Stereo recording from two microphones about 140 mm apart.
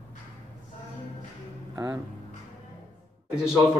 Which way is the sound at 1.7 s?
25° right (ahead or behind).